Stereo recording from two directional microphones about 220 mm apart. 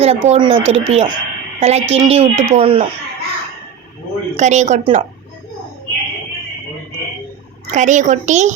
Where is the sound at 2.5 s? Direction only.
25° right (ahead or behind).